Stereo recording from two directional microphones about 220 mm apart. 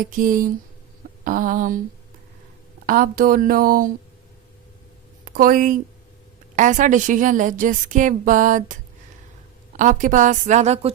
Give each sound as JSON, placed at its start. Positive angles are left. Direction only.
{"t": 0.0, "sound": "a woman's voice", "side_deg": -35}
{"t": 2.8, "sound": "a woman's voice", "side_deg": -40}
{"t": 5.3, "sound": "a woman's voice", "side_deg": -40}